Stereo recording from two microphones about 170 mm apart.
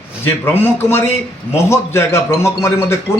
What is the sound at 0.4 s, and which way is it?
A man's voice, 15° left (ahead or behind).